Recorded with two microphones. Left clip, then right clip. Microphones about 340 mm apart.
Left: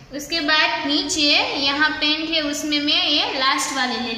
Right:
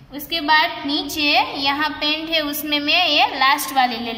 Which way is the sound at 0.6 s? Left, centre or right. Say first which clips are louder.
Even; centre.